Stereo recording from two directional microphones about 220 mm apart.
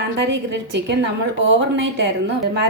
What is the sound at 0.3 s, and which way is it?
A woman's voice, 50° right (ahead or behind).